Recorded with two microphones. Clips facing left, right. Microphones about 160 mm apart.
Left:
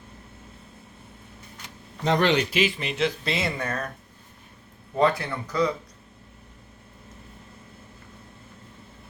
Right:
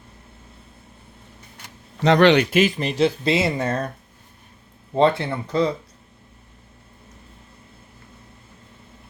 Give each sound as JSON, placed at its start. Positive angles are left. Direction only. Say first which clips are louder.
{"t": 2.0, "sound": "speech", "louder": "right 7 dB", "side_deg": -70}
{"t": 4.9, "sound": "speech", "louder": "right 4 dB", "side_deg": -25}